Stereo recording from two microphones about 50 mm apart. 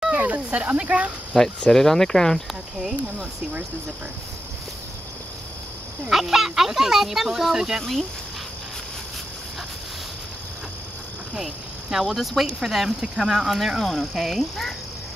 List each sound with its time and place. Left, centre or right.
0.1 s speech: right
1.3 s speech: centre
2.8 s speech: centre
6.0 s speech: centre
7.8 s speech: centre
11.3 s speech: centre
13.8 s speech: centre